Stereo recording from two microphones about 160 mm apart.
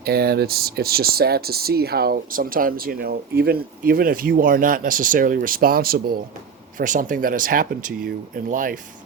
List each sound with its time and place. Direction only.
0.0 s speech: 75° right (ahead or behind)
6.7 s speech: 55° right (ahead or behind)